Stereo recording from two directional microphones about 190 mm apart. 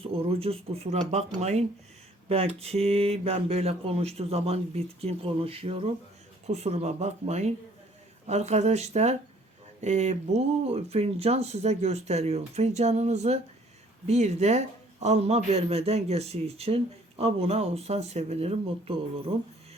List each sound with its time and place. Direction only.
0.0 s speech: 30° right (ahead or behind)